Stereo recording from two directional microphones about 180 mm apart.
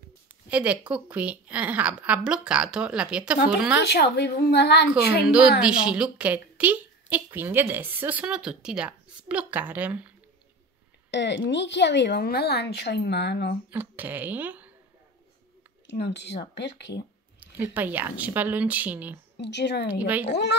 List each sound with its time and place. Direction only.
0.5 s a woman's voice: 5° right (ahead or behind)
3.8 s a woman's voice: 65° left (ahead or behind)
5.2 s a woman's voice: 5° right (ahead or behind)
11.1 s a woman's voice: 75° left (ahead or behind)
13.7 s a woman's voice: 10° right (ahead or behind)
15.9 s a woman's voice: 70° left (ahead or behind)
17.4 s a woman's voice: 10° right (ahead or behind)
19.3 s a woman's voice: 70° left (ahead or behind)
19.9 s a woman's voice: 10° right (ahead or behind)